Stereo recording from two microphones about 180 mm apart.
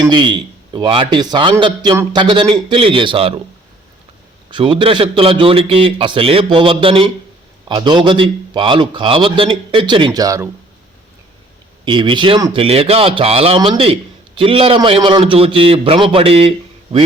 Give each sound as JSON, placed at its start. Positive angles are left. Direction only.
{"t": 0.0, "sound": "a man's voice", "side_deg": -25}
{"t": 4.5, "sound": "a man's voice", "side_deg": -30}
{"t": 11.9, "sound": "a man's voice", "side_deg": -25}